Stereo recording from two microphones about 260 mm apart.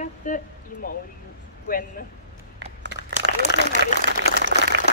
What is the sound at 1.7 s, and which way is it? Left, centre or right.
Speech, left.